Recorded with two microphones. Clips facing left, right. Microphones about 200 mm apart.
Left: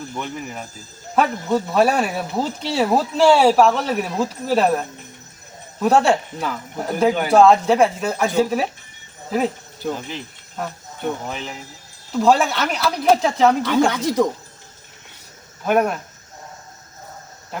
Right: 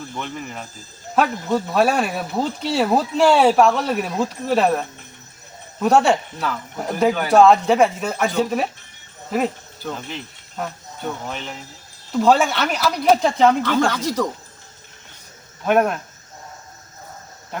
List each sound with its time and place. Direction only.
0.1 s speech: 5° left (ahead or behind)
7.3 s speech: centre (ahead or behind)
13.7 s speech: 15° left (ahead or behind)
15.6 s speech: 5° left (ahead or behind)